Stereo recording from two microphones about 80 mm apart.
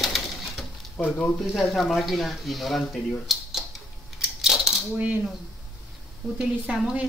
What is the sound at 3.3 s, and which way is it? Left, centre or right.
Typewriter, centre.